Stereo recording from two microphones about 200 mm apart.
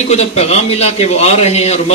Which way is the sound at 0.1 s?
30° left (ahead or behind).